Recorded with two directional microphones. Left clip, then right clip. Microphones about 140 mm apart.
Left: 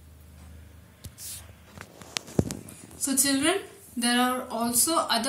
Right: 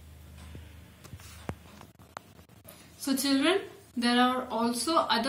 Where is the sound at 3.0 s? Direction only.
10° left (ahead or behind).